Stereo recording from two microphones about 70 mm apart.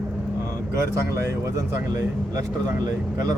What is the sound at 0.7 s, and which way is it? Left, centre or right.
A man's voice, right.